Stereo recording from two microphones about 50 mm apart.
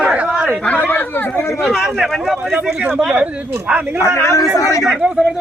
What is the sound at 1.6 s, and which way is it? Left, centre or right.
A man's voice, centre.